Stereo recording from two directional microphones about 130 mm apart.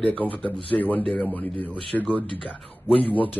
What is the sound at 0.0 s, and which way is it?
Speech, 10° left (ahead or behind).